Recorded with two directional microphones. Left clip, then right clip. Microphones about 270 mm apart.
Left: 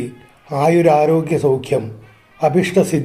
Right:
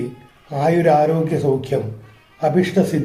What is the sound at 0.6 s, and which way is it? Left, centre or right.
Speech, left.